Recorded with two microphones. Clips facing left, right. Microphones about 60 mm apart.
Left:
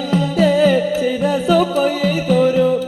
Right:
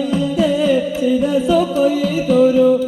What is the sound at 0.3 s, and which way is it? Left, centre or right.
Music, left.